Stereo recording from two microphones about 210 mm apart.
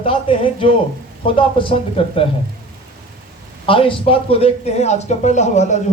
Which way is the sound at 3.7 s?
25° left (ahead or behind).